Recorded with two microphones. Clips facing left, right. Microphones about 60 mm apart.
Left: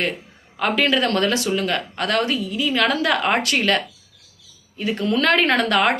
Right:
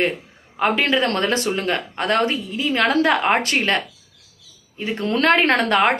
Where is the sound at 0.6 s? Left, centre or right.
Right.